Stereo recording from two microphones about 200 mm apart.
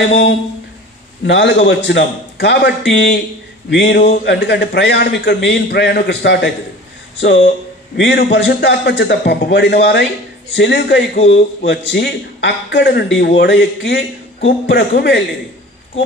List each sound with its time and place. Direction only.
0.1 s a man's voice: 65° left (ahead or behind)
3.8 s a man's voice: 50° left (ahead or behind)